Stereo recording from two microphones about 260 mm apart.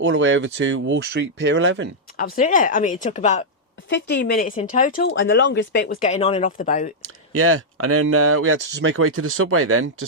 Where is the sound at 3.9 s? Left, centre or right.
Left.